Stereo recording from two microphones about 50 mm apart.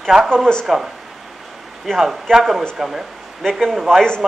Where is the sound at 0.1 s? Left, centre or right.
Centre.